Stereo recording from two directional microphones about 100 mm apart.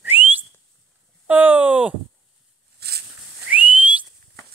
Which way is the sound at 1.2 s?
15° right (ahead or behind).